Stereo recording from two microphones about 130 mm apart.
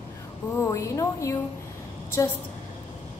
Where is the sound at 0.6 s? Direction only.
25° left (ahead or behind).